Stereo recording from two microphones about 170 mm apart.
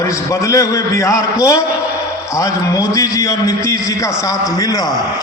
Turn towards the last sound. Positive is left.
turn(degrees=20)  # may be behind; listen again after turning